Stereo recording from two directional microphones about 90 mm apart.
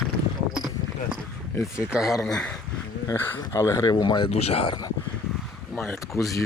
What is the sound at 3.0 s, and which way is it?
Speech, 25° left (ahead or behind).